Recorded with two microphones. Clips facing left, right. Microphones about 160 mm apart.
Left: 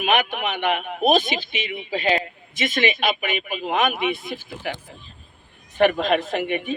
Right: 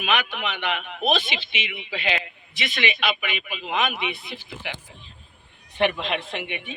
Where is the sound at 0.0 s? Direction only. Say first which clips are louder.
Left 4 dB; 50° left (ahead or behind).